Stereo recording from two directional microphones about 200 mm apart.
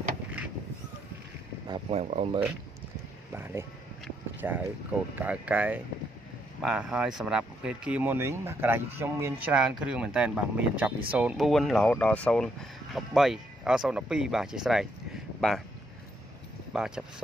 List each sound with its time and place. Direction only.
0.4 s a sound: 5° right (ahead or behind)
1.7 s speech: 30° right (ahead or behind)
4.4 s speech: 10° right (ahead or behind)
16.7 s speech: 5° right (ahead or behind)